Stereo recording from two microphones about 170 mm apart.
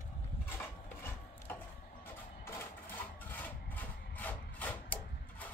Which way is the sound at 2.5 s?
10° left (ahead or behind).